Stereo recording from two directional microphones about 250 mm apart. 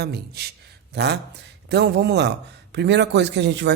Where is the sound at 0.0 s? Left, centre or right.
Right.